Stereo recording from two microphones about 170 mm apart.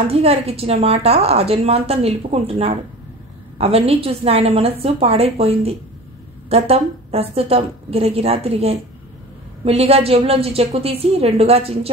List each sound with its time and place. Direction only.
0.1 s a woman's voice: 35° right (ahead or behind)